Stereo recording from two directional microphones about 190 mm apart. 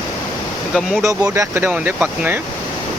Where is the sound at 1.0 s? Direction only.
15° right (ahead or behind).